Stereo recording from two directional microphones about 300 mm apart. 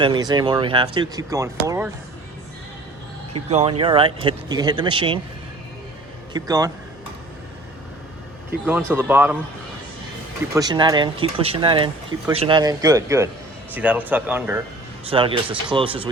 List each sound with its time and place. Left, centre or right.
0.0 s speech: centre
3.5 s speech: right
6.3 s speech: centre
8.4 s speech: centre
10.5 s speech: centre
15.0 s speech: centre